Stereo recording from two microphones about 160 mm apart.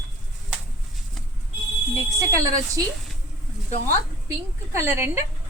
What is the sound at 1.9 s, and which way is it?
Speech, 20° right (ahead or behind).